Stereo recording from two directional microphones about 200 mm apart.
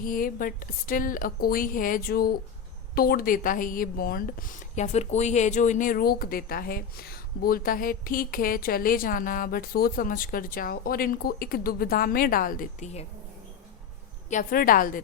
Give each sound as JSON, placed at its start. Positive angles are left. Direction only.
{"t": 0.0, "sound": "a woman's voice", "side_deg": 45}
{"t": 14.3, "sound": "a woman's voice", "side_deg": 40}